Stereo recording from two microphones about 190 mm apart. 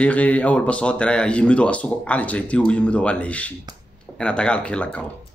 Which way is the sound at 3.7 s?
20° right (ahead or behind).